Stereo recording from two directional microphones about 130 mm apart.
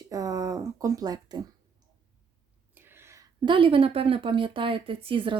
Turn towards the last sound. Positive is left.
turn(degrees=-40)  # may be behind; listen again after turning